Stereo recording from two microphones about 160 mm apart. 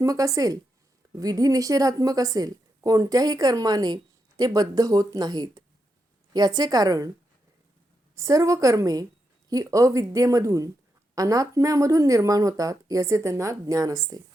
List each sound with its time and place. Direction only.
0.0 s a woman's voice: 20° right (ahead or behind)
8.1 s a woman's voice: 20° right (ahead or behind)